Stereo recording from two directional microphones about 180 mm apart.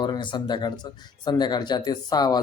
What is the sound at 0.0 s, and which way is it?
Speech, 25° left (ahead or behind).